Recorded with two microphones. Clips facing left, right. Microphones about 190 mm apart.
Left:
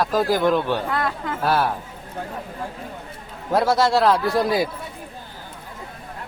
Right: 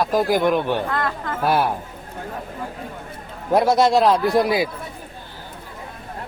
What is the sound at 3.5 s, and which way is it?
A man's voice, 20° right (ahead or behind).